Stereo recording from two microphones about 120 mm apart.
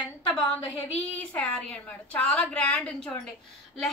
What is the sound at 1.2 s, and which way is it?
A woman's voice, 10° left (ahead or behind).